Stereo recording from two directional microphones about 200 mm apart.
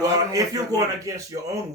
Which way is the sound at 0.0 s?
20° right (ahead or behind).